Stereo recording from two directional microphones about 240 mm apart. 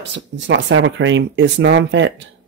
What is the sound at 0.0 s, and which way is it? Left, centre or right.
Speech, right.